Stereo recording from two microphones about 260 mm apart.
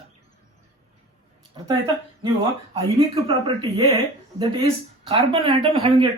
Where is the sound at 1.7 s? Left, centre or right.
Centre.